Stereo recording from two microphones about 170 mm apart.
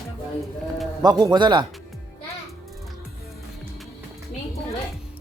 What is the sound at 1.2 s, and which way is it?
Speech, 25° right (ahead or behind).